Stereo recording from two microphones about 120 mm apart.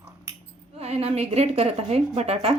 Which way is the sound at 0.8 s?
55° right (ahead or behind).